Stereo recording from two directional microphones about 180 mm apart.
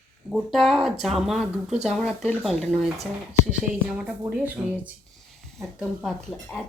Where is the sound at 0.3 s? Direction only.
Centre (ahead or behind).